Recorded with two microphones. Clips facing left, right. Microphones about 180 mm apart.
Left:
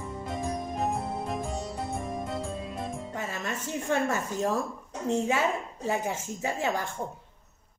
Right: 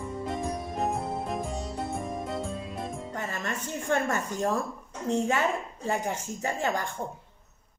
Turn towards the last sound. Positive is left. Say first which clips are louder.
# even
turn(degrees=5)  # may be behind; listen again after turning